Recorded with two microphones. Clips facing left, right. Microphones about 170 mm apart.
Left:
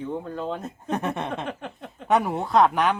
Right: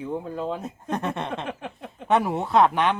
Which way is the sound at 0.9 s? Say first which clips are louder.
Left 1 dB; 10° left (ahead or behind).